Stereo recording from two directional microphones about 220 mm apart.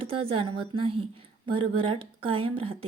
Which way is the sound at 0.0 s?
25° right (ahead or behind).